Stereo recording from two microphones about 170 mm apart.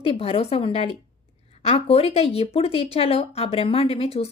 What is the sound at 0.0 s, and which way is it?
A woman's voice, 35° left (ahead or behind).